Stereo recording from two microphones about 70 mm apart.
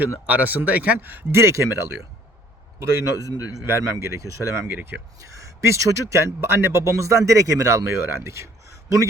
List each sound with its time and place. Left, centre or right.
0.3 s speech: right
1.4 s speech: right
3.6 s speech: right
4.7 s speech: right
5.3 s speech: right